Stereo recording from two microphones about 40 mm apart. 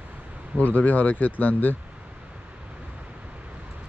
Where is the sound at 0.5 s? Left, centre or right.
Left.